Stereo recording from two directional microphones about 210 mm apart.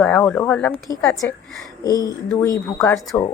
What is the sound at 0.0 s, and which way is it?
Speech, 5° left (ahead or behind).